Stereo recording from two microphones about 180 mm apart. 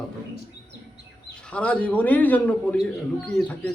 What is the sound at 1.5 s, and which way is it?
A man's voice, 5° left (ahead or behind).